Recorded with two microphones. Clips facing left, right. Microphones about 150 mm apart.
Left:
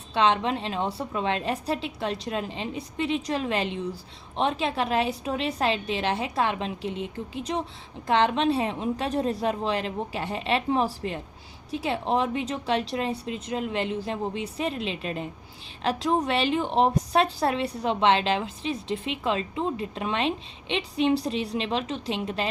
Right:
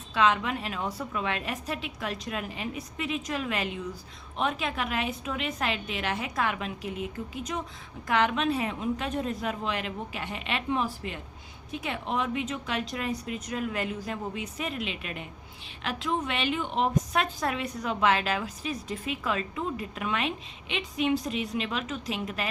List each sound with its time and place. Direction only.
0.1 s a woman's voice: 30° left (ahead or behind)